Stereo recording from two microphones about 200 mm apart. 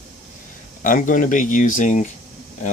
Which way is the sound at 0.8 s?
40° left (ahead or behind).